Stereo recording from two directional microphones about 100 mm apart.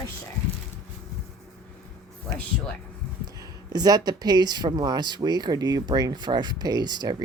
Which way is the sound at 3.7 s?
40° right (ahead or behind).